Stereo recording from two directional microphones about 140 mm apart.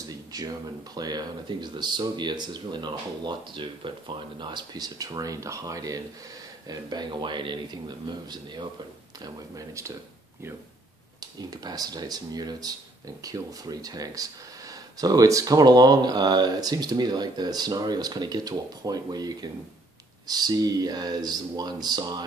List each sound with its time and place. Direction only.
0.1 s speech: 25° right (ahead or behind)
9.2 s speech: 20° right (ahead or behind)
11.1 s speech: 30° right (ahead or behind)